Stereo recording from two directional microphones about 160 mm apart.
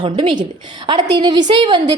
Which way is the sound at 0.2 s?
30° right (ahead or behind).